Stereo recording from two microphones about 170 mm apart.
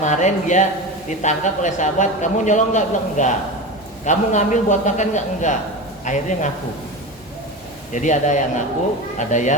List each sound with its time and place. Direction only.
0.0 s a man's voice: 45° left (ahead or behind)
7.9 s a man's voice: 45° left (ahead or behind)